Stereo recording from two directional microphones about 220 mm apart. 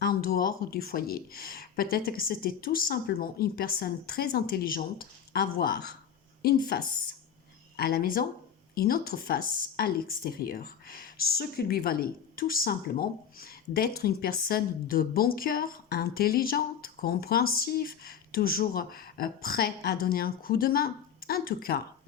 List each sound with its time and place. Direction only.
0.0 s speech: 45° left (ahead or behind)